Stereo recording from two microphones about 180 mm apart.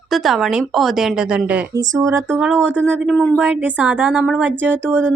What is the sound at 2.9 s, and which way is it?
Speech, 5° right (ahead or behind).